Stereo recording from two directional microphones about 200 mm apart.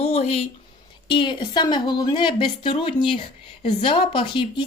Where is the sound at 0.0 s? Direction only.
30° left (ahead or behind).